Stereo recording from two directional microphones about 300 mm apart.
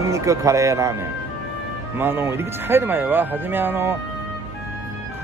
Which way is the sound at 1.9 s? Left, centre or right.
Centre.